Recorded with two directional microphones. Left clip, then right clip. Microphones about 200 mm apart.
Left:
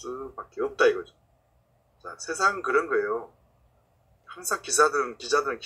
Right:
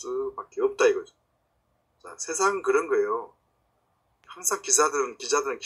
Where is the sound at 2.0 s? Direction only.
35° right (ahead or behind).